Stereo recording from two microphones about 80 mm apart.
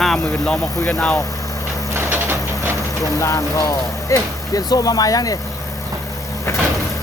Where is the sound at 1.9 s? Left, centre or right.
Right.